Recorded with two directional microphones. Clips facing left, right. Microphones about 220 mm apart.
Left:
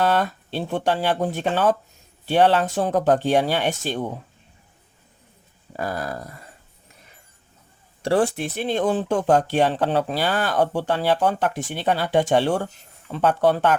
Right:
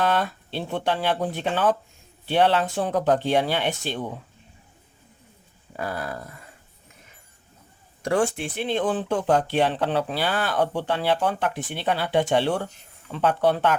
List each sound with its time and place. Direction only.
0.0 s speech: 45° left (ahead or behind)
5.7 s a sound: 40° left (ahead or behind)
8.0 s speech: 35° left (ahead or behind)